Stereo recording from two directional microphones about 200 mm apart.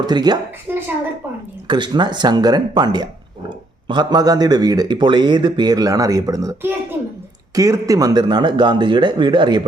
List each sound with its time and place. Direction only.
0.0 s speech: 20° right (ahead or behind)